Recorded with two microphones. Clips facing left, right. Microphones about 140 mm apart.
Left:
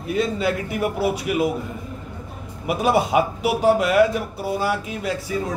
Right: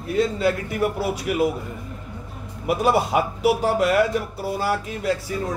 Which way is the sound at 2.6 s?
15° left (ahead or behind).